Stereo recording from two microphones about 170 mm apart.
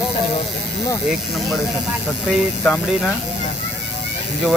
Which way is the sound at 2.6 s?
5° left (ahead or behind).